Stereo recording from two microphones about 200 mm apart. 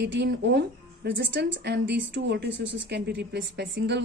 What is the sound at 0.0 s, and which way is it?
A woman's voice, 60° right (ahead or behind).